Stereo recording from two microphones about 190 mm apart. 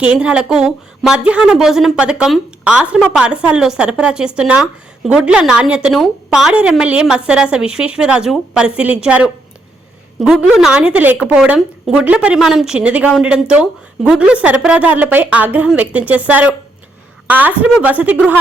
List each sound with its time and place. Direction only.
0.0 s a woman's voice: 5° right (ahead or behind)